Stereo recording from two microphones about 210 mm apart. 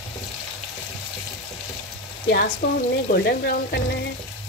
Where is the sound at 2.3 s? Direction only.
50° left (ahead or behind).